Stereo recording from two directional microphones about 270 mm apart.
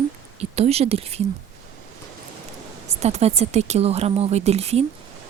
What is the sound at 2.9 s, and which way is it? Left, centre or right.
Speech, right.